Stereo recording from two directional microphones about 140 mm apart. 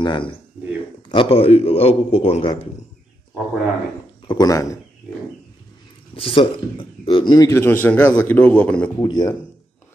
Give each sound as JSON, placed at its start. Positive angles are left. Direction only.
{"t": 0.0, "sound": "a man's voice", "side_deg": 35}
{"t": 4.3, "sound": "speech", "side_deg": 25}
{"t": 6.1, "sound": "speech", "side_deg": 40}
{"t": 9.0, "sound": "speech", "side_deg": 30}